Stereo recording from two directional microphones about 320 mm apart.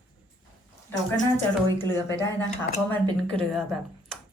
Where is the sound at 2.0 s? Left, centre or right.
Centre.